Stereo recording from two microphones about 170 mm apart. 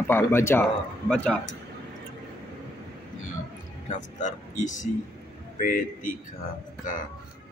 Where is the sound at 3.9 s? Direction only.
45° left (ahead or behind).